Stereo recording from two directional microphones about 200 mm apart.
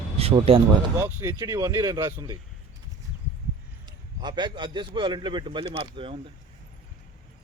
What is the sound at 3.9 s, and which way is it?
A man's voice, 20° right (ahead or behind).